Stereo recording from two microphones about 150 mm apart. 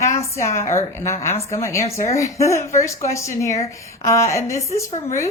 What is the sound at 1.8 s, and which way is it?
Speech, 45° left (ahead or behind).